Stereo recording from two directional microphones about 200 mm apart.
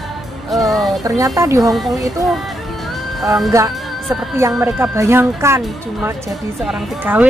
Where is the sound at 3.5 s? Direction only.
15° right (ahead or behind).